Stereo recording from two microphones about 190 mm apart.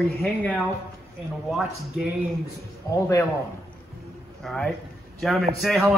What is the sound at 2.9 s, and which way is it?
Speech, 15° left (ahead or behind).